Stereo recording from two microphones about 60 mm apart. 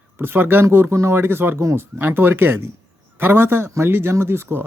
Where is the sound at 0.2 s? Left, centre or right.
Right.